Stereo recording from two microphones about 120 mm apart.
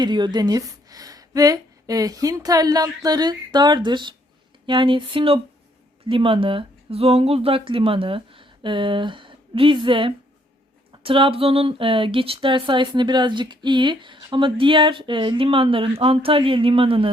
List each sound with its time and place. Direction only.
0.0 s speech: 40° right (ahead or behind)